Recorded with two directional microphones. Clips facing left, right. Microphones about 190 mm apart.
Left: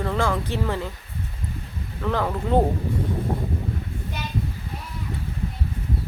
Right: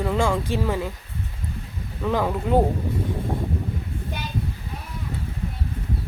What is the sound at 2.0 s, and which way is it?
Speech, 10° right (ahead or behind).